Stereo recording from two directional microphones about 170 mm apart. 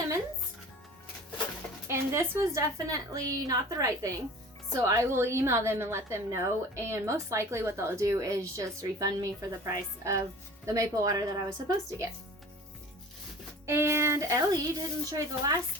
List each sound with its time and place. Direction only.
1.9 s a woman's voice: 15° right (ahead or behind)
13.7 s a woman's voice: 15° right (ahead or behind)